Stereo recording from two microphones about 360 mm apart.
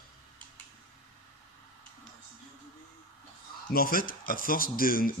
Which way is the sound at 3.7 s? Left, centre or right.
Left.